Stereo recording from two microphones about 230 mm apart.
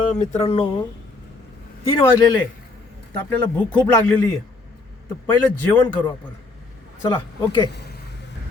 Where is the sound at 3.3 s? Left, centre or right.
Centre.